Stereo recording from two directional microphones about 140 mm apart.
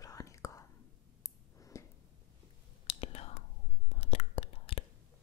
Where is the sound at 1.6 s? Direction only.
20° left (ahead or behind).